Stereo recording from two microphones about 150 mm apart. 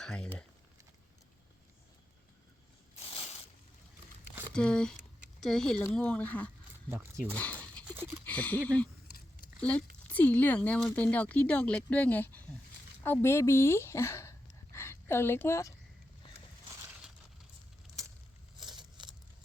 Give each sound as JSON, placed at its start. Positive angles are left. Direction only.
{"t": 0.0, "sound": "speech", "side_deg": 5}
{"t": 2.9, "sound": "a sound", "side_deg": 40}
{"t": 4.5, "sound": "speech", "side_deg": 5}
{"t": 6.9, "sound": "speech", "side_deg": -15}
{"t": 7.3, "sound": "dog", "side_deg": 10}
{"t": 8.2, "sound": "speech", "side_deg": 10}
{"t": 18.8, "sound": "a sound", "side_deg": -30}